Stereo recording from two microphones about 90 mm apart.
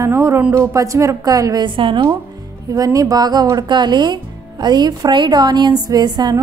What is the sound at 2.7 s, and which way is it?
Speech, 40° right (ahead or behind).